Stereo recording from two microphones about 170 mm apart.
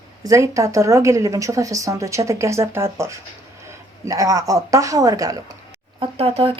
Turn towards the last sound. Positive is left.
turn(degrees=-35)  # may be behind; listen again after turning